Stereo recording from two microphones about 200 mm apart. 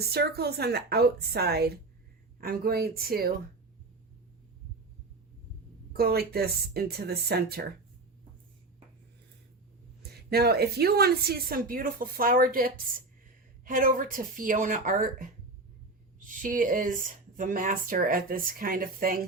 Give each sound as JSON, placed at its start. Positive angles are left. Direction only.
{"t": 0.0, "sound": "speech", "side_deg": -50}
{"t": 5.9, "sound": "speech", "side_deg": -50}
{"t": 10.0, "sound": "speech", "side_deg": -50}